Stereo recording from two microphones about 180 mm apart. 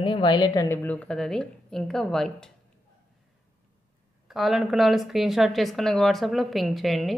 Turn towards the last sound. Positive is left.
turn(degrees=0)  # may be behind; listen again after turning